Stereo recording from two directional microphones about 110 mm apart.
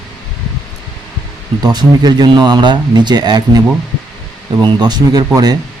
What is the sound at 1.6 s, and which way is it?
Speech, 40° right (ahead or behind).